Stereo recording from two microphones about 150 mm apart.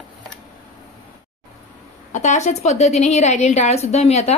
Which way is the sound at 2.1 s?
50° left (ahead or behind).